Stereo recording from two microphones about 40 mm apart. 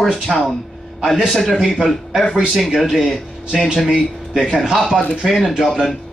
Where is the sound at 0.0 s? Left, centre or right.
Centre.